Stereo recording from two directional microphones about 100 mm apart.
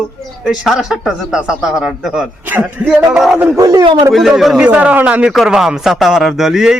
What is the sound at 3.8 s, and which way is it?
Speech, 55° right (ahead or behind).